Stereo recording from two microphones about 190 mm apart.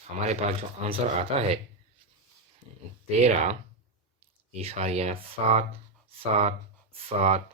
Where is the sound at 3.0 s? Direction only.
35° right (ahead or behind).